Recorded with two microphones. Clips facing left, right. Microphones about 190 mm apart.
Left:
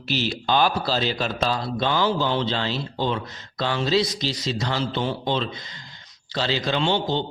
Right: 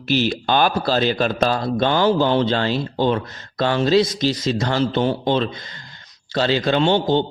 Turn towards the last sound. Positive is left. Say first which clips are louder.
# right 6 dB
turn(degrees=-50)  # may be behind; listen again after turning